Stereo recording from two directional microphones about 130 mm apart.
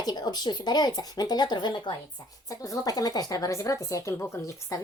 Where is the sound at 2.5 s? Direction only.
25° left (ahead or behind).